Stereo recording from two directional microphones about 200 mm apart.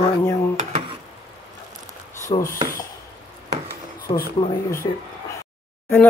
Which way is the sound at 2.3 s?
25° left (ahead or behind).